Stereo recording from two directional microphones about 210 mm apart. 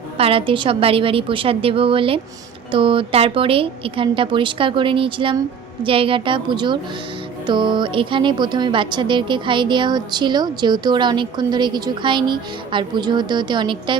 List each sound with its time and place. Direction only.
0.2 s a woman's voice: 25° right (ahead or behind)